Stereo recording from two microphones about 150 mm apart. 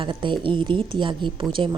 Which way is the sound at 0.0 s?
35° right (ahead or behind).